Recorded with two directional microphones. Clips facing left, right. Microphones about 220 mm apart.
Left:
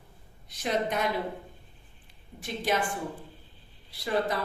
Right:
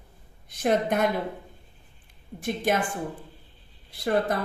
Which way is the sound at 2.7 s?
50° right (ahead or behind).